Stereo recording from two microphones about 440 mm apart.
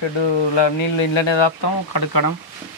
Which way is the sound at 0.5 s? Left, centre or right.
Left.